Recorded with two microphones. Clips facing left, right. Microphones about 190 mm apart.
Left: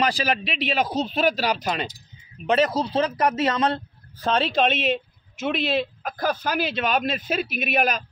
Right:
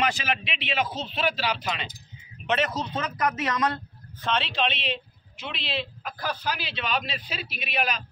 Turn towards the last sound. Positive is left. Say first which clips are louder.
# left 6 dB
turn(degrees=45)  # may be behind; listen again after turning